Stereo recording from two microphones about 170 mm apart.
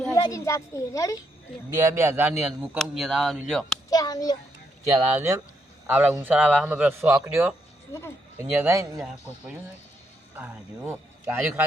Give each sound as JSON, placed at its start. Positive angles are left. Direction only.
{"t": 0.1, "sound": "a child's voice", "side_deg": 20}
{"t": 1.8, "sound": "a man's voice", "side_deg": -15}
{"t": 2.3, "sound": "speech", "side_deg": 0}
{"t": 3.8, "sound": "a sound", "side_deg": 20}
{"t": 4.9, "sound": "a man's voice", "side_deg": -15}
{"t": 7.9, "sound": "speech", "side_deg": 15}
{"t": 8.4, "sound": "a man's voice", "side_deg": -15}
{"t": 10.3, "sound": "a man's voice", "side_deg": -10}